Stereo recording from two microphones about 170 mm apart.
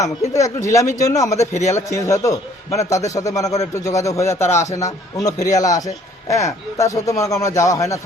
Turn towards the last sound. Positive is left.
turn(degrees=20)  # may be behind; listen again after turning